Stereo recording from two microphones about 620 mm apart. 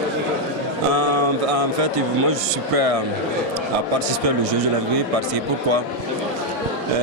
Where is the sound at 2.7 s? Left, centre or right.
Right.